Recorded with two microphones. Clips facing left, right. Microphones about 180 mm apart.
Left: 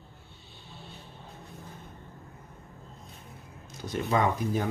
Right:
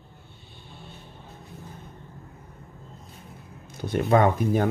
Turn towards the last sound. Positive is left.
turn(degrees=-60)  # may be behind; listen again after turning